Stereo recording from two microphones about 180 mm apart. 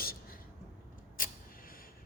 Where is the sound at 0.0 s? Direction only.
55° left (ahead or behind).